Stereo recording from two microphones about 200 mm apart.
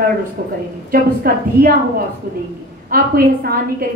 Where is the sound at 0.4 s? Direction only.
45° right (ahead or behind).